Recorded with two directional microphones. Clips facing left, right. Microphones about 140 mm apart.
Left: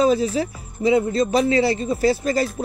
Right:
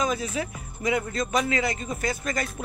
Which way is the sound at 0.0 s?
30° left (ahead or behind).